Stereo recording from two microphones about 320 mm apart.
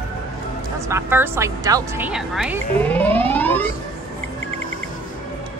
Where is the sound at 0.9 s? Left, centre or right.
Centre.